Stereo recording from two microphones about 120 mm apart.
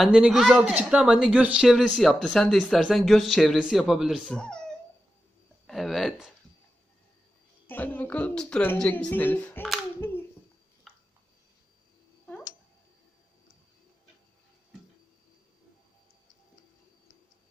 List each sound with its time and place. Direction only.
0.0 s speech: 5° right (ahead or behind)
5.7 s speech: centre (ahead or behind)
7.6 s a woman's voice: 15° left (ahead or behind)